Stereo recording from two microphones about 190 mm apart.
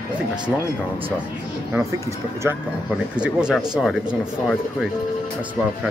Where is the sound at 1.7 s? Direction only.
15° right (ahead or behind).